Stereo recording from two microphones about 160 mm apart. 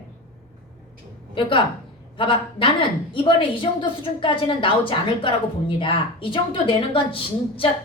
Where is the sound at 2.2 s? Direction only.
35° left (ahead or behind).